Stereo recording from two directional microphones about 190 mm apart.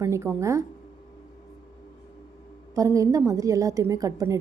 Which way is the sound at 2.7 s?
15° right (ahead or behind).